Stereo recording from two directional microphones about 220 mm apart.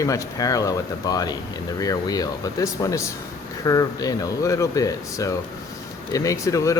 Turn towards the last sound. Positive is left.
turn(degrees=15)  # may be behind; listen again after turning